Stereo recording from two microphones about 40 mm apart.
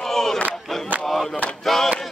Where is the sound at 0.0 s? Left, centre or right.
Centre.